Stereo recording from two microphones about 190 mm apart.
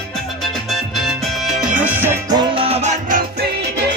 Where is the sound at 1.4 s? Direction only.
5° right (ahead or behind).